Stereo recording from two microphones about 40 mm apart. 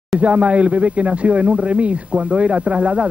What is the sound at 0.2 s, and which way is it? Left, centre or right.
Speech, right.